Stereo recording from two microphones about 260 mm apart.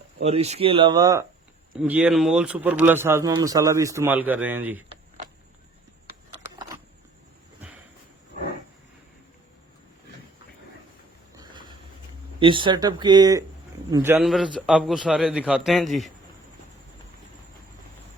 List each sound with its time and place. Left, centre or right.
0.2 s speech: right; by 4.9 s centre
12.4 s a man's voice: centre